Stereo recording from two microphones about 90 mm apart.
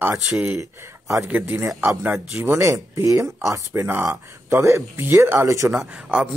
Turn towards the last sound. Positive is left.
turn(degrees=-10)  # may be behind; listen again after turning